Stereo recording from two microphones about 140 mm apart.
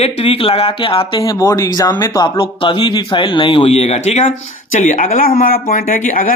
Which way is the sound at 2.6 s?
35° left (ahead or behind).